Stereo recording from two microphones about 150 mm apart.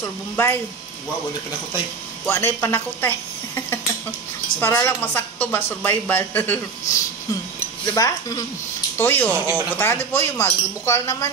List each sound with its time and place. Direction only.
0.0 s speech: 15° left (ahead or behind)
2.2 s speech: 20° left (ahead or behind)
7.8 s speech: 25° left (ahead or behind)
8.9 s speech: 15° left (ahead or behind)